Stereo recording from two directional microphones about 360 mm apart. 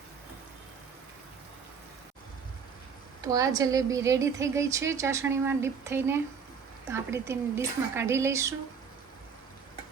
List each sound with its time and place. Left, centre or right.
3.3 s a woman's voice: centre